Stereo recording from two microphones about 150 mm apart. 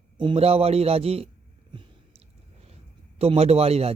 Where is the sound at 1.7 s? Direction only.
40° right (ahead or behind).